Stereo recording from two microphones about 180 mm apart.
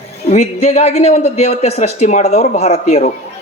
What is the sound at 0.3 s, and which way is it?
A woman's voice, 40° left (ahead or behind).